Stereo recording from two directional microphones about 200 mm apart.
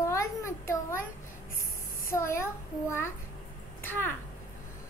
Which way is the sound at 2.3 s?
15° left (ahead or behind).